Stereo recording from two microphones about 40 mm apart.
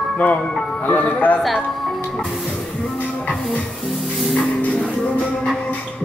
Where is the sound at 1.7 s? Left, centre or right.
Centre.